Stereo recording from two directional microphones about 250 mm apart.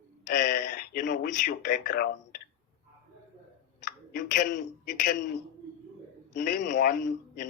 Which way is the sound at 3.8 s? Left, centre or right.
Left.